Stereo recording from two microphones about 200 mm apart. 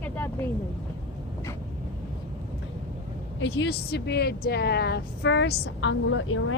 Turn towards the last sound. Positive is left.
turn(degrees=80)